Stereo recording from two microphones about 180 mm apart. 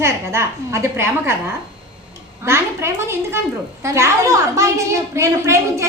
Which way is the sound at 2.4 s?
15° right (ahead or behind).